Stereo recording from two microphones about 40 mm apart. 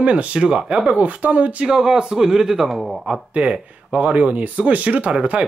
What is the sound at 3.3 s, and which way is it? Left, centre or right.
Speech, right.